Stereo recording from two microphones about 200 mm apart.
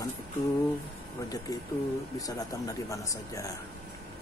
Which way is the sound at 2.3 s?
15° left (ahead or behind).